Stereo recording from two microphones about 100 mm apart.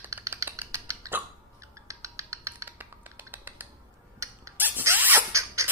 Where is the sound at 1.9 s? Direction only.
30° right (ahead or behind).